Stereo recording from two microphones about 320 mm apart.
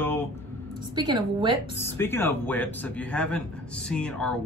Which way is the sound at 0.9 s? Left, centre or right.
Centre.